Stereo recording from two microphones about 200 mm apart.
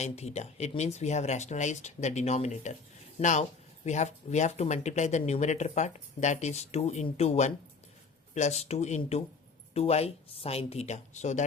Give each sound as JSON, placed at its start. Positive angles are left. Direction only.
{"t": 0.0, "sound": "speech", "side_deg": 35}